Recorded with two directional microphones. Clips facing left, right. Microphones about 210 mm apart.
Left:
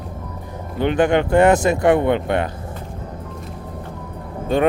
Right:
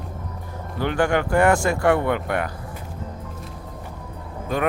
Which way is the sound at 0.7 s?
20° left (ahead or behind).